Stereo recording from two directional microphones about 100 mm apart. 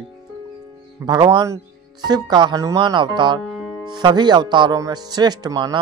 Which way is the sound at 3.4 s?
Centre (ahead or behind).